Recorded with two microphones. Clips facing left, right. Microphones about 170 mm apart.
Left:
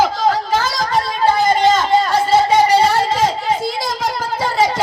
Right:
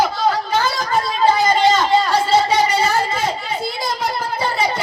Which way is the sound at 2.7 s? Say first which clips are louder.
Left 4 dB; 65° left (ahead or behind).